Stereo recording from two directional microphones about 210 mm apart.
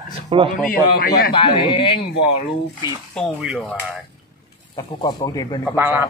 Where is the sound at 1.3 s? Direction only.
25° left (ahead or behind).